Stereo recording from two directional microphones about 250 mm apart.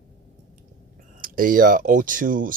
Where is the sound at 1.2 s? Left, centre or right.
Right.